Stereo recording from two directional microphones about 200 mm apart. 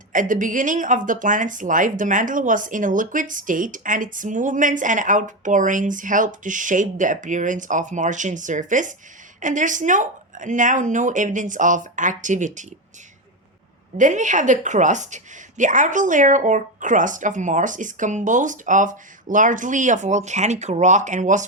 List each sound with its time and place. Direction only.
0.1 s speech: 40° right (ahead or behind)
14.0 s speech: 40° right (ahead or behind)